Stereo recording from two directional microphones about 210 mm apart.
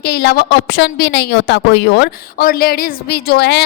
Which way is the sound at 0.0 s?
50° left (ahead or behind).